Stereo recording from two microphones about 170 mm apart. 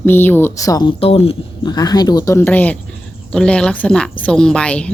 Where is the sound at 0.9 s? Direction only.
35° left (ahead or behind).